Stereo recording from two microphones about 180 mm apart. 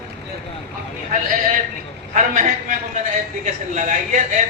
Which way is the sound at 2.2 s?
45° right (ahead or behind).